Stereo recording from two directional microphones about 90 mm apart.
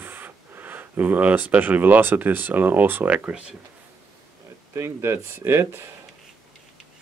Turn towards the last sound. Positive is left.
turn(degrees=-30)  # may be behind; listen again after turning